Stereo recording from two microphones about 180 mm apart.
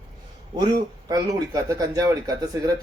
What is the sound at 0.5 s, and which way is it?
Speech, 20° right (ahead or behind).